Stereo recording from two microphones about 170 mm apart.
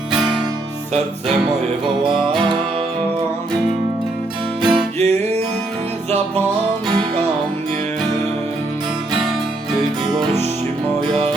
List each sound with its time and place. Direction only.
4.6 s music: 35° right (ahead or behind)
6.8 s music: 30° right (ahead or behind)